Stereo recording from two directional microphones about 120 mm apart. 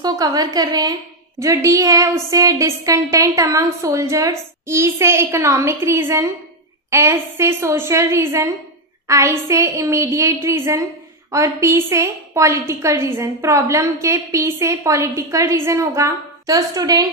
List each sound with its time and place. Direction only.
0.0 s a woman's voice: 35° right (ahead or behind)